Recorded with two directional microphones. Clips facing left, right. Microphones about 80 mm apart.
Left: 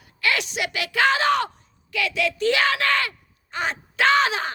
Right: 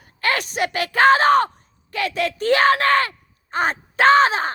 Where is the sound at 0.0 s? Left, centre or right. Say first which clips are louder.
Right 2 dB; right.